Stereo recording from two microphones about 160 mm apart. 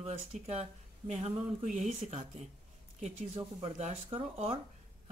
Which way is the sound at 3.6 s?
40° right (ahead or behind).